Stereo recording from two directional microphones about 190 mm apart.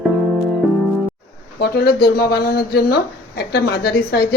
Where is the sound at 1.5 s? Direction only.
55° left (ahead or behind).